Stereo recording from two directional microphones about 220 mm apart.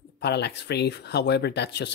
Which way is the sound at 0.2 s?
50° left (ahead or behind).